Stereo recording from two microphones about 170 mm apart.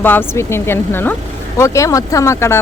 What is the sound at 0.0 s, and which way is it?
Speech, 10° left (ahead or behind).